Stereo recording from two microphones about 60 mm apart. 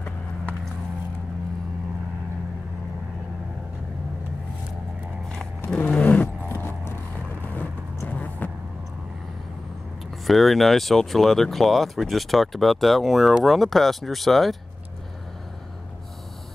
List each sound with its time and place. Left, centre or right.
5.8 s roar: left
6.2 s vehicle: left
8.1 s vehicle: left
10.2 s speech: centre